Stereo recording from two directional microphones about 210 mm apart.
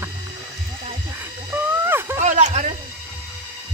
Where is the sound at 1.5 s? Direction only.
10° right (ahead or behind).